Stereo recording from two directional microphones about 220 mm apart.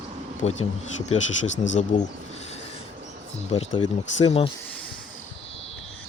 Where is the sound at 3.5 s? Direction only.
20° left (ahead or behind).